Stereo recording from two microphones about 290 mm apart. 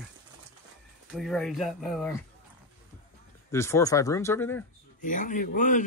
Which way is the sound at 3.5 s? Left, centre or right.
Centre.